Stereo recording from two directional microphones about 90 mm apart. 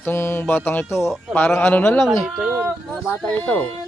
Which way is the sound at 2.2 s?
5° right (ahead or behind).